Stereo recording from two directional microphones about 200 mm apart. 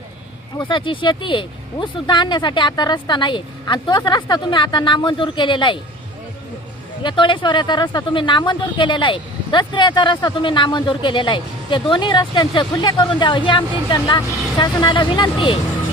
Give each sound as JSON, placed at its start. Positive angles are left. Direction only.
{"t": 0.6, "sound": "speech", "side_deg": 25}
{"t": 7.0, "sound": "speech", "side_deg": 25}